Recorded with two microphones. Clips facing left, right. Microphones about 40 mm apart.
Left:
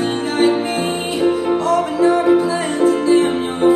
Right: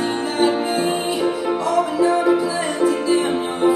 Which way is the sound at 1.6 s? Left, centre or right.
Left.